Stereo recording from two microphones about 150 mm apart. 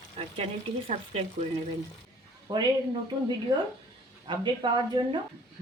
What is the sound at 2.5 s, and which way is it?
Speech, 30° right (ahead or behind).